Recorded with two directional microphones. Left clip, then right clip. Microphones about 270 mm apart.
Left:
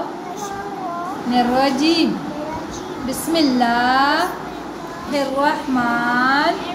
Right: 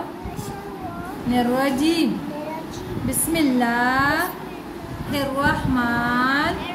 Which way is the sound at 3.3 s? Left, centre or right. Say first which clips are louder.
Left 4 dB; centre.